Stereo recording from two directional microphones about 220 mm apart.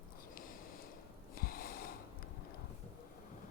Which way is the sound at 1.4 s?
40° left (ahead or behind).